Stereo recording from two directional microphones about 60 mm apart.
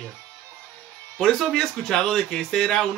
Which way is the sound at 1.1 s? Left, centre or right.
Centre.